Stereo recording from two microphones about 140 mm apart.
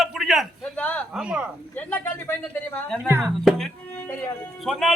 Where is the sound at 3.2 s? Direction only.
Centre (ahead or behind).